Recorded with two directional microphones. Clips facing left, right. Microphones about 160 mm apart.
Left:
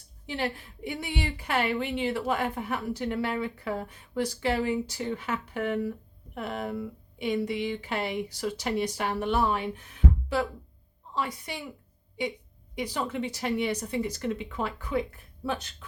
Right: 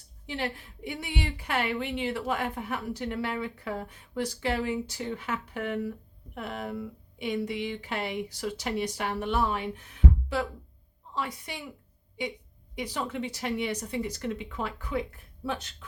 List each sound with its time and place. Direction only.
0.3 s a woman's voice: 40° left (ahead or behind)
11.1 s a woman's voice: 35° left (ahead or behind)